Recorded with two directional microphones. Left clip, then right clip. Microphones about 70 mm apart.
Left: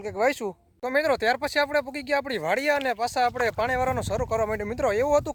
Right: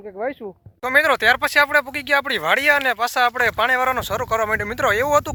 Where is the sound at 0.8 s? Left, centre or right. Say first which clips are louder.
Right 7 dB; centre.